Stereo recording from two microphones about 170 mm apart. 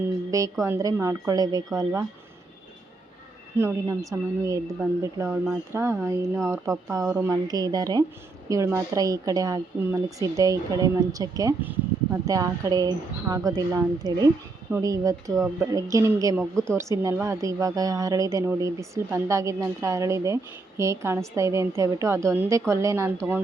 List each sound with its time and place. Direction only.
0.3 s a woman's voice: 20° right (ahead or behind)
3.6 s a woman's voice: 15° right (ahead or behind)